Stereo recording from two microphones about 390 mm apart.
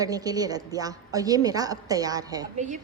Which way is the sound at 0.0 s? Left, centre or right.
Centre.